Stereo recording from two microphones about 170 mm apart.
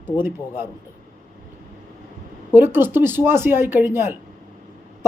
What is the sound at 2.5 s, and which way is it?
A man's voice, 10° right (ahead or behind).